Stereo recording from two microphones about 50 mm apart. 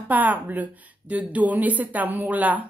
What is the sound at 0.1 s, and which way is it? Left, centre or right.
A woman's voice, right.